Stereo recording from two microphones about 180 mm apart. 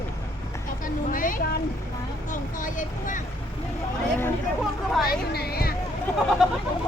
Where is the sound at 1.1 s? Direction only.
50° left (ahead or behind).